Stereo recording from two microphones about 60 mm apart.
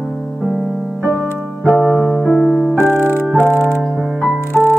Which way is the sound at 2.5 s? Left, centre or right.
Left.